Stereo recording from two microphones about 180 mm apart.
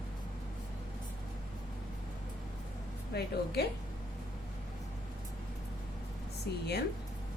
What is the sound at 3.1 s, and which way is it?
Speech, 65° left (ahead or behind).